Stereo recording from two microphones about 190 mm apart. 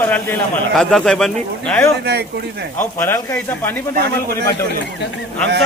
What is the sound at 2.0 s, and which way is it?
Speech, 60° right (ahead or behind).